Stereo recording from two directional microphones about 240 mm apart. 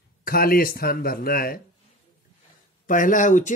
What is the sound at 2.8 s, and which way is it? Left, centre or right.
Speech, left.